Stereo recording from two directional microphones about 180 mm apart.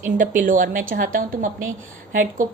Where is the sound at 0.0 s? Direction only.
45° right (ahead or behind).